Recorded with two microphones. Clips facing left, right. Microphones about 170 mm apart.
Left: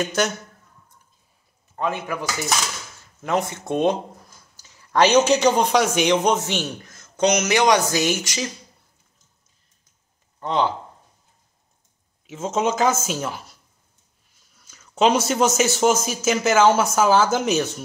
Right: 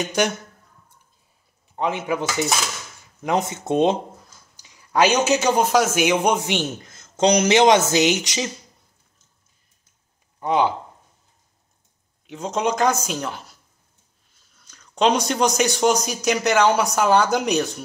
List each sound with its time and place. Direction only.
0.0 s a man's voice: 15° right (ahead or behind)
1.8 s speech: 20° right (ahead or behind)
4.6 s a man's voice: 10° right (ahead or behind)
10.4 s a man's voice: 10° right (ahead or behind)
12.3 s a man's voice: 5° left (ahead or behind)
14.5 s a man's voice: 5° left (ahead or behind)